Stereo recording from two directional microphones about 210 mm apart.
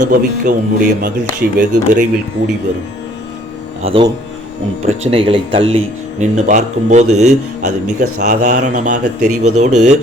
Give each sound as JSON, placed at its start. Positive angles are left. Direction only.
{"t": 0.0, "sound": "speech", "side_deg": -40}
{"t": 3.8, "sound": "speech", "side_deg": -25}